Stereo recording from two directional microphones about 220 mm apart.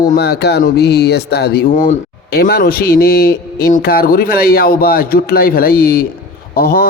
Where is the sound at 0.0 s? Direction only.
45° left (ahead or behind).